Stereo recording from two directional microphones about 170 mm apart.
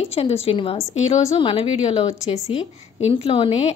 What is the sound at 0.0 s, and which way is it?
A woman's voice, 35° left (ahead or behind).